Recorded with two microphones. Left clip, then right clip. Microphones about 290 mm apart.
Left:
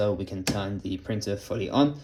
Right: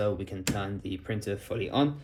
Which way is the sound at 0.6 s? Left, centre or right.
Left.